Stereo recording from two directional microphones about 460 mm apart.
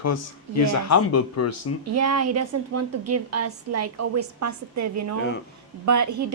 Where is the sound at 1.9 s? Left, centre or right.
Right.